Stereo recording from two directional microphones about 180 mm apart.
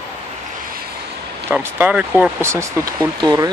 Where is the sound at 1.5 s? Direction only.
10° right (ahead or behind).